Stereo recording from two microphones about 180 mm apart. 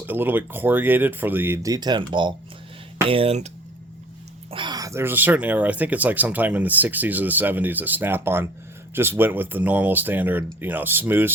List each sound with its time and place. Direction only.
0.0 s speech: 10° right (ahead or behind); by 3.5 s 35° right (ahead or behind)
4.5 s speech: 25° right (ahead or behind)